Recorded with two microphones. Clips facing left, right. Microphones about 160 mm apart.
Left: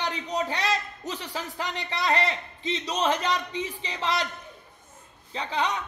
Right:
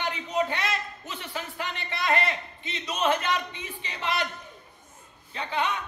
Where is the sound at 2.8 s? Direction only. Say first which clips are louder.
Right 1 dB; 35° left (ahead or behind).